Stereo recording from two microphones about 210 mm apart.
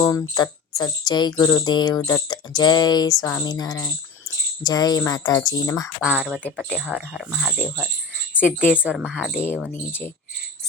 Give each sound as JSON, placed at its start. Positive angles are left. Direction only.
{"t": 0.0, "sound": "speech", "side_deg": 15}
{"t": 6.0, "sound": "speech", "side_deg": -5}
{"t": 8.7, "sound": "speech", "side_deg": -5}
{"t": 9.3, "sound": "speech", "side_deg": 10}